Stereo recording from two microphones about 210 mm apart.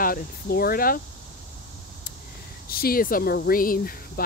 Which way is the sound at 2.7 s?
45° left (ahead or behind).